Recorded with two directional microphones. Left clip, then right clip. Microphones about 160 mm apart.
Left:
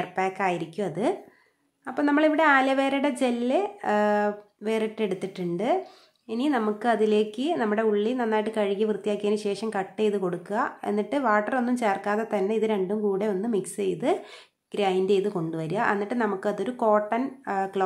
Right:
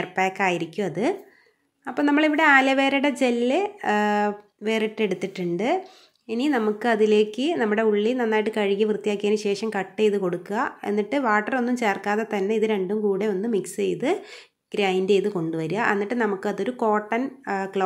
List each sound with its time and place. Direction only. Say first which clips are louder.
0.0 s speech: right 3 dB; 15° right (ahead or behind)